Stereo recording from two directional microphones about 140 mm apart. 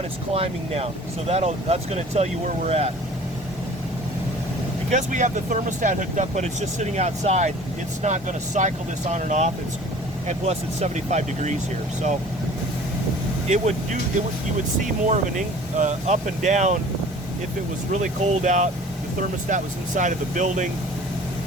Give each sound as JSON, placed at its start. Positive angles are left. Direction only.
{"t": 0.3, "sound": "speech", "side_deg": -45}
{"t": 4.9, "sound": "speech", "side_deg": -60}
{"t": 13.5, "sound": "speech", "side_deg": -55}
{"t": 15.0, "sound": "speech", "side_deg": -60}
{"t": 17.9, "sound": "speech", "side_deg": -55}